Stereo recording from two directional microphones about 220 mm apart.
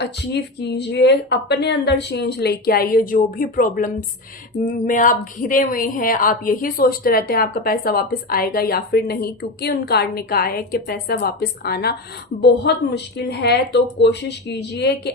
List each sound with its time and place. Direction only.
0.0 s a woman's voice: 50° left (ahead or behind)